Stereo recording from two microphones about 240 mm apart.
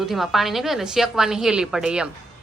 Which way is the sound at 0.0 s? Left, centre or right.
Centre.